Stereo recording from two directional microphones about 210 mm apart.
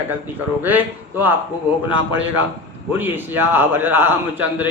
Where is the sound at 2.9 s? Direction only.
10° right (ahead or behind).